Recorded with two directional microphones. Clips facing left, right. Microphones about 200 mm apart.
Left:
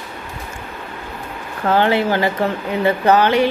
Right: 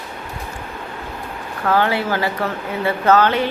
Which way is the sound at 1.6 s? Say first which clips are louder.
Left 3 dB; 25° left (ahead or behind).